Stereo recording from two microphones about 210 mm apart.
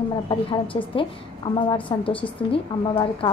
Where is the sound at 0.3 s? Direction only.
25° left (ahead or behind).